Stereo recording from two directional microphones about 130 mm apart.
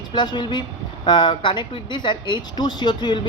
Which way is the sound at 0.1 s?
35° left (ahead or behind).